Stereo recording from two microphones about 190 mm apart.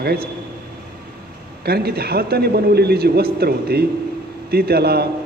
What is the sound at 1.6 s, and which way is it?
A man's voice, 55° right (ahead or behind).